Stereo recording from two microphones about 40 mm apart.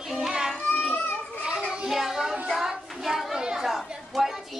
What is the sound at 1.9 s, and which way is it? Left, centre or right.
Child singing, centre.